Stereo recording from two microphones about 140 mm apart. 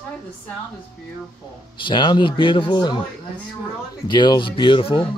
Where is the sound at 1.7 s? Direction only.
35° left (ahead or behind).